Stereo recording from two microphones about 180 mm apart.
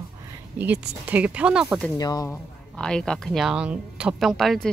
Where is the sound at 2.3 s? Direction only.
5° left (ahead or behind).